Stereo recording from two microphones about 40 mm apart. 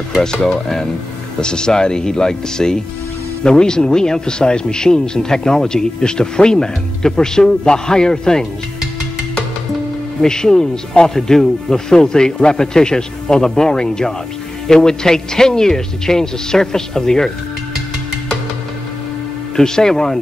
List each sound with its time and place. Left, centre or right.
0.1 s speech: centre
10.2 s speech: centre
19.5 s speech: centre